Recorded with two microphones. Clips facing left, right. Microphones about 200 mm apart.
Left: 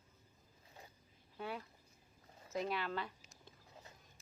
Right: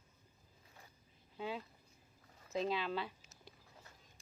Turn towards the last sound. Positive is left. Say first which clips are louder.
# right 2 dB
turn(degrees=-10)  # may be behind; listen again after turning